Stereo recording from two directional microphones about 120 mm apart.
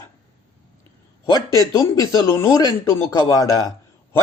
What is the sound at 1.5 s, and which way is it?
A man's voice, 25° left (ahead or behind).